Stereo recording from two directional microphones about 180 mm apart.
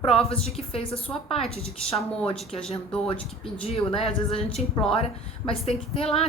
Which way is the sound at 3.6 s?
30° left (ahead or behind).